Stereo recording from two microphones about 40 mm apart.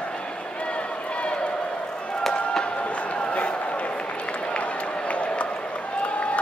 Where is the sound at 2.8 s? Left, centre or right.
Left.